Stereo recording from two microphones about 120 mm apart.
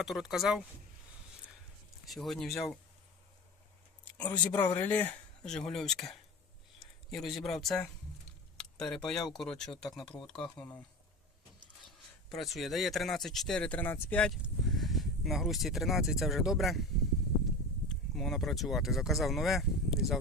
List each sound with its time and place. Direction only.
0.0 s speech: 5° right (ahead or behind)
2.0 s speech: centre (ahead or behind)
4.0 s a sound: 15° left (ahead or behind)
4.5 s speech: 15° left (ahead or behind)
5.5 s speech: 5° left (ahead or behind)
11.8 s speech: centre (ahead or behind)
14.7 s speech: centre (ahead or behind)
17.8 s speech: 5° left (ahead or behind)